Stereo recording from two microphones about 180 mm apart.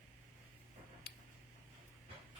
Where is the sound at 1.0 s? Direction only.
65° left (ahead or behind).